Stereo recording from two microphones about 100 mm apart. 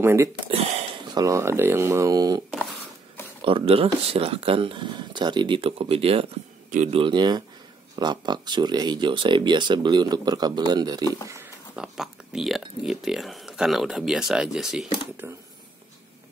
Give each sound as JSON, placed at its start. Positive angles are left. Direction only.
{"t": 0.0, "sound": "speech", "side_deg": -25}
{"t": 0.5, "sound": "speech", "side_deg": -90}
{"t": 1.1, "sound": "speech", "side_deg": -35}
{"t": 3.4, "sound": "speech", "side_deg": -70}
{"t": 5.6, "sound": "speech", "side_deg": -70}
{"t": 7.1, "sound": "speech", "side_deg": -45}
{"t": 11.7, "sound": "speech", "side_deg": -5}
{"t": 15.2, "sound": "speech", "side_deg": -25}